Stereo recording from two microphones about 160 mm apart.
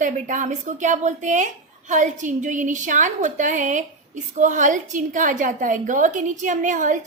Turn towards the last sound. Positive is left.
turn(degrees=-55)  # may be behind; listen again after turning